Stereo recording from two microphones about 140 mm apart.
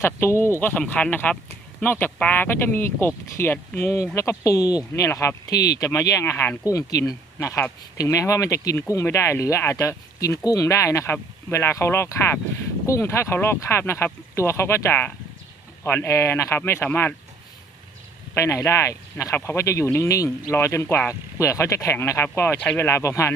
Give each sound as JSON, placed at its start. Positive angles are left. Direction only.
{"t": 0.0, "sound": "speech", "side_deg": 20}
{"t": 18.3, "sound": "speech", "side_deg": 20}